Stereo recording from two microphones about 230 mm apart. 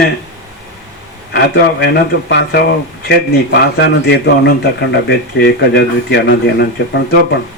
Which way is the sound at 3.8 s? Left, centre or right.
Left.